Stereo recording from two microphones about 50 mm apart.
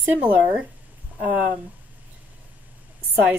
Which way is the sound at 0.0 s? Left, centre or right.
Right.